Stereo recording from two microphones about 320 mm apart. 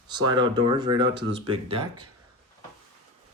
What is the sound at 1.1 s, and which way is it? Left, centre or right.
Speech, right.